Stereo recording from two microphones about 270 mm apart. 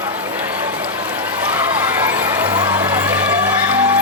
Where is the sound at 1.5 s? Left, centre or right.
Centre.